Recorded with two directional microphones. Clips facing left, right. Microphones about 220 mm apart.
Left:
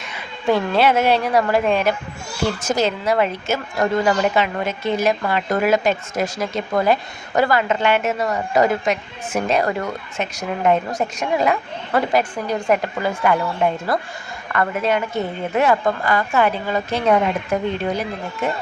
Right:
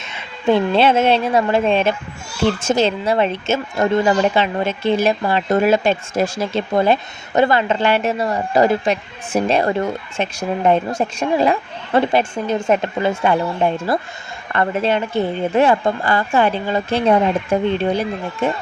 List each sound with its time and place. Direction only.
0.0 s a woman's voice: 25° right (ahead or behind)
14.5 s a woman's voice: 30° right (ahead or behind)